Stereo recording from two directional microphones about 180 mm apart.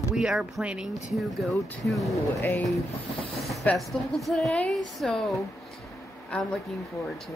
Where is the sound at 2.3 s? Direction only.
10° left (ahead or behind).